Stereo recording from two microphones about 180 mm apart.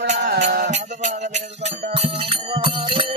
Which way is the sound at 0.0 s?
40° right (ahead or behind).